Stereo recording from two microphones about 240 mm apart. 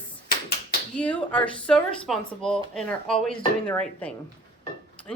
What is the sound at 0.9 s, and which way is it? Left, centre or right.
Speech, centre.